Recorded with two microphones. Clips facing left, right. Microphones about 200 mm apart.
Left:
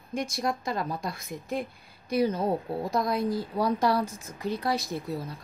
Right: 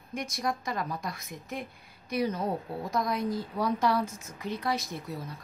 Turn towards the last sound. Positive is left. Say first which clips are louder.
# left 5 dB
turn(degrees=30)  # may be behind; listen again after turning